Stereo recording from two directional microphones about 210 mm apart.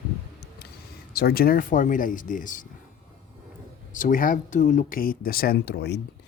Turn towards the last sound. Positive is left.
turn(degrees=50)  # may be behind; listen again after turning